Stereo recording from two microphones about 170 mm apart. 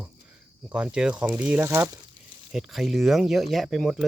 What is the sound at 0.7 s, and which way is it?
Speech, 5° right (ahead or behind).